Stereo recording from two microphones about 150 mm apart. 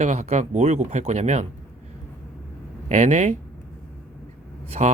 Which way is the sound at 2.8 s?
50° right (ahead or behind).